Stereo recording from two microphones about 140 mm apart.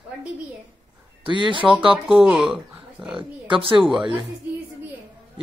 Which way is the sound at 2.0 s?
5° right (ahead or behind).